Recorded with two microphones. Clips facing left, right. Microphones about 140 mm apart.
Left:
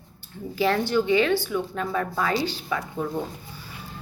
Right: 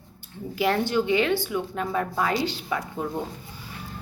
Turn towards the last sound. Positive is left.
turn(degrees=-20)  # may be behind; listen again after turning